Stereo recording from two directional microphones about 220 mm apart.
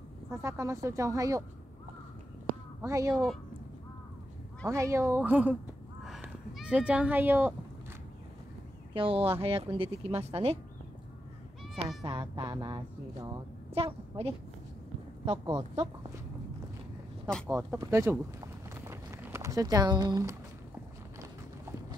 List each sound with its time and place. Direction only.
0.3 s speech: 10° right (ahead or behind)
2.8 s speech: 15° right (ahead or behind)
3.1 s speech: centre (ahead or behind)
4.6 s speech: 15° right (ahead or behind)
6.0 s a sound: centre (ahead or behind)
8.9 s speech: 25° right (ahead or behind)
12.0 s a woman's voice: 20° right (ahead or behind)
17.3 s speech: 5° left (ahead or behind)
17.6 s speech: 10° right (ahead or behind)
18.9 s a sound: 10° right (ahead or behind)